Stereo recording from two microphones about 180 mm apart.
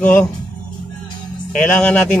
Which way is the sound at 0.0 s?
5° left (ahead or behind).